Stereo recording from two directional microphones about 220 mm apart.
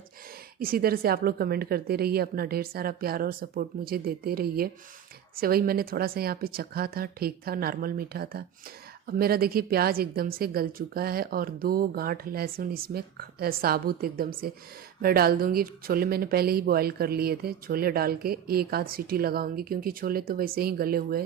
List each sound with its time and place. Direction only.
0.6 s speech: 40° right (ahead or behind)